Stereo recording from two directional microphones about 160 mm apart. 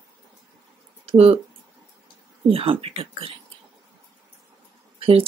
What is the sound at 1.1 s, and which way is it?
Speech, 35° right (ahead or behind).